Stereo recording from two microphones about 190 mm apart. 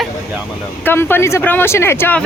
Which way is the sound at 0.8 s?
10° left (ahead or behind).